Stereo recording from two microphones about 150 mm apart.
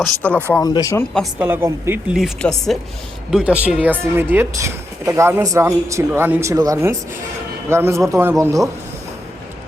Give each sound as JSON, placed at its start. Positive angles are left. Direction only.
{"t": 0.0, "sound": "speech", "side_deg": 10}
{"t": 0.6, "sound": "speech", "side_deg": 25}
{"t": 1.4, "sound": "speech", "side_deg": -15}
{"t": 2.1, "sound": "speech", "side_deg": 0}
{"t": 3.3, "sound": "speech", "side_deg": -10}